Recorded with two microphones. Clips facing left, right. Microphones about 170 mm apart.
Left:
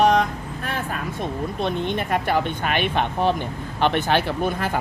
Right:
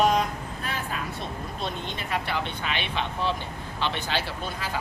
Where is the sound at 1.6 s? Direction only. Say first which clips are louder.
Left 9 dB; 60° left (ahead or behind).